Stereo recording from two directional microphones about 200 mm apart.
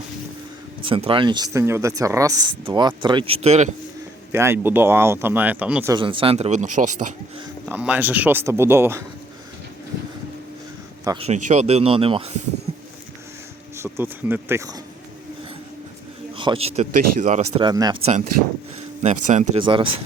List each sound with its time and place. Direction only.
0.9 s speech: 25° right (ahead or behind)
4.3 s speech: 10° right (ahead or behind)
5.9 s speech: 25° right (ahead or behind)
7.6 s speech: 5° right (ahead or behind)
11.2 s speech: 35° right (ahead or behind)
12.7 s a sound: 25° right (ahead or behind)
13.7 s speech: 10° right (ahead or behind)
16.3 s speech: 25° right (ahead or behind)
17.7 s speech: 20° right (ahead or behind)
19.0 s speech: 35° right (ahead or behind)